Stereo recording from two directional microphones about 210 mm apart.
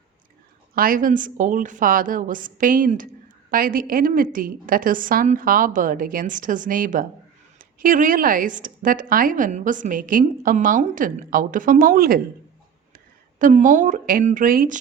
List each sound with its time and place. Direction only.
0.8 s a woman's voice: 40° right (ahead or behind)
13.4 s a woman's voice: 35° right (ahead or behind)